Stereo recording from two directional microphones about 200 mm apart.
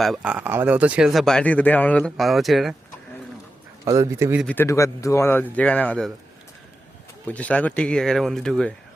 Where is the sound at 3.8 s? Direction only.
15° right (ahead or behind).